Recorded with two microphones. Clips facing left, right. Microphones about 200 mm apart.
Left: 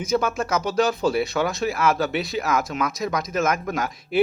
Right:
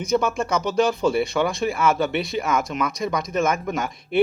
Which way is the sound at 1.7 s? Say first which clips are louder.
Right 1 dB; 5° left (ahead or behind).